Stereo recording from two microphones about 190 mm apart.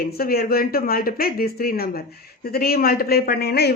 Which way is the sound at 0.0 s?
50° left (ahead or behind).